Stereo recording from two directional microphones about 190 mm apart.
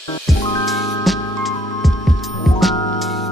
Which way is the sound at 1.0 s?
Centre (ahead or behind).